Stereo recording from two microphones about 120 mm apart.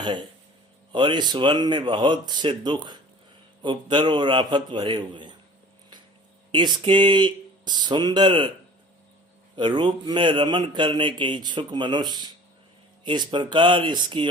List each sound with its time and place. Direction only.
0.0 s speech: 40° right (ahead or behind)
6.5 s speech: 40° right (ahead or behind)
9.6 s speech: 40° right (ahead or behind)